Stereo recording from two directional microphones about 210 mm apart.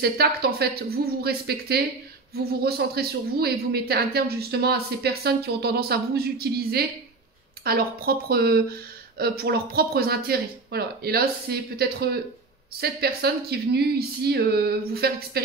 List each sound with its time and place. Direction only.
0.0 s speech: 50° right (ahead or behind)